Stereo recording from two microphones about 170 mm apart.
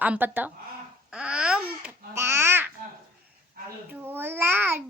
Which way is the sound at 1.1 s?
5° right (ahead or behind).